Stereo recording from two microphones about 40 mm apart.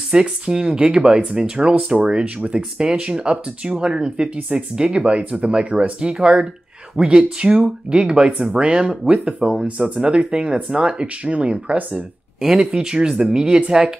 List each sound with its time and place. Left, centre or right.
0.1 s speech: right